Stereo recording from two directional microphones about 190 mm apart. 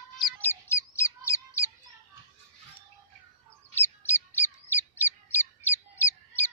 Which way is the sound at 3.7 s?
10° left (ahead or behind).